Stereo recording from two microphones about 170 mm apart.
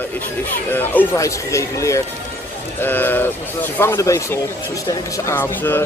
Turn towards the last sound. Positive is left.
turn(degrees=10)  # may be behind; listen again after turning